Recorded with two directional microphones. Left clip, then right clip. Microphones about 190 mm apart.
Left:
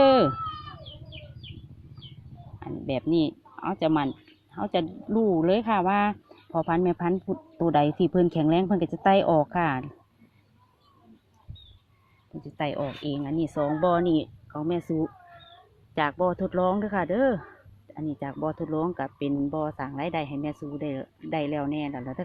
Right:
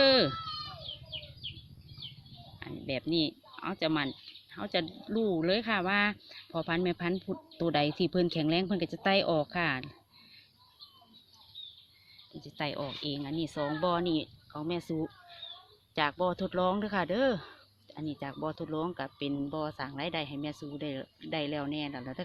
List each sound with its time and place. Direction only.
0.0 s chicken: centre (ahead or behind)
2.6 s speech: centre (ahead or behind)
12.4 s speech: 5° left (ahead or behind)
14.8 s speech: 10° right (ahead or behind)